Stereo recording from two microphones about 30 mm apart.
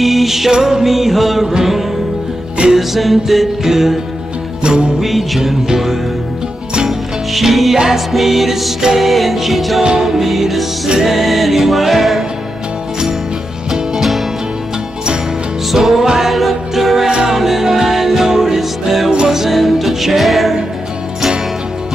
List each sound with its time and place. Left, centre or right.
0.0 s music: centre
0.8 s music: centre
4.6 s music: right
5.0 s music: centre
6.9 s music: centre
7.7 s music: centre
8.1 s music: centre
9.9 s music: centre
13.7 s music: centre
15.7 s music: centre